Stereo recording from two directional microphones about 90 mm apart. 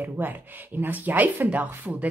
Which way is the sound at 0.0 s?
20° right (ahead or behind).